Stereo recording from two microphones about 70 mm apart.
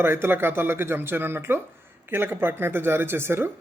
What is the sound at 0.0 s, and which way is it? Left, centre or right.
Speech, right.